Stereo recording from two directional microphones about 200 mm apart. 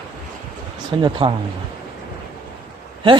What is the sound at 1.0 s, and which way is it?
Speech, 25° right (ahead or behind).